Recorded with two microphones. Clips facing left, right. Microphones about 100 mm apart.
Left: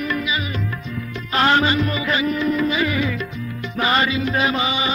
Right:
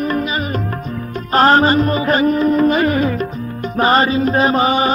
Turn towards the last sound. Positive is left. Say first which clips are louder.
# right 7 dB
turn(degrees=-45)  # may be behind; listen again after turning